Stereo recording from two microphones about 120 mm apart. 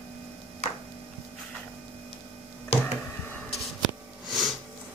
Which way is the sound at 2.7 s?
55° left (ahead or behind).